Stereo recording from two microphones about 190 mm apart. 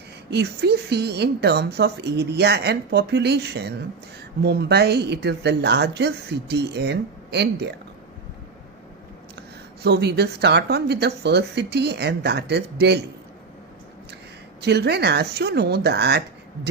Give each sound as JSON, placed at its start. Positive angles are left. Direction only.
{"t": 0.3, "sound": "a woman's voice", "side_deg": -60}
{"t": 9.8, "sound": "a woman's voice", "side_deg": -60}
{"t": 14.6, "sound": "a woman's voice", "side_deg": -60}